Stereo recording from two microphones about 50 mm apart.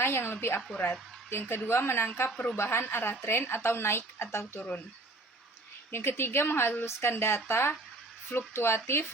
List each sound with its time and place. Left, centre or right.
0.0 s a woman's voice: left
5.9 s a woman's voice: left
6.8 s a woman's voice: left